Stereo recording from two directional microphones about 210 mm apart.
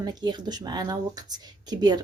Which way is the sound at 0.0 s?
20° right (ahead or behind).